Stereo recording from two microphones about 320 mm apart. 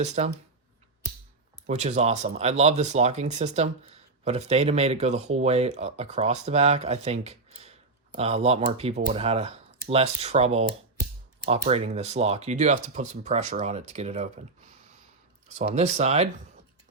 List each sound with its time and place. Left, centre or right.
0.0 s speech: right
1.6 s speech: right
15.5 s speech: right